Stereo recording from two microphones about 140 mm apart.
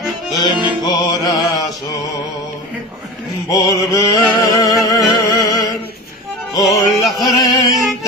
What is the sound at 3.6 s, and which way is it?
Music, 25° left (ahead or behind).